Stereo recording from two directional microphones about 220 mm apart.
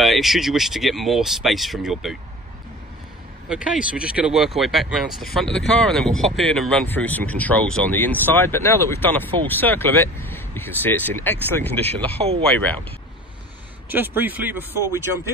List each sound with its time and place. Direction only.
0.0 s speech: centre (ahead or behind)
3.4 s speech: 5° right (ahead or behind)
12.2 s speech: 25° right (ahead or behind)
13.8 s speech: 10° right (ahead or behind)